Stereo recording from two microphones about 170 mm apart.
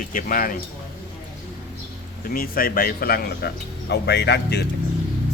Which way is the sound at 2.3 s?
60° left (ahead or behind).